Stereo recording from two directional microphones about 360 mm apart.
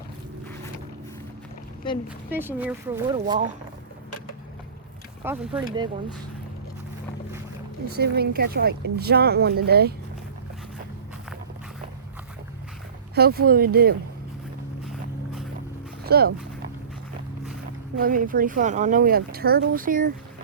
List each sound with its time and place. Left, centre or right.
2.3 s speech: centre
5.2 s speech: centre
7.9 s speech: right
13.1 s speech: right
16.0 s speech: right
18.0 s speech: right